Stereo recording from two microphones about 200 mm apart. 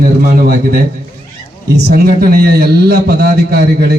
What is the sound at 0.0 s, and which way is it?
A man's voice, 45° right (ahead or behind).